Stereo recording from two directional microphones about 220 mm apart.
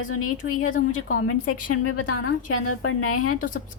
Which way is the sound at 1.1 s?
75° left (ahead or behind).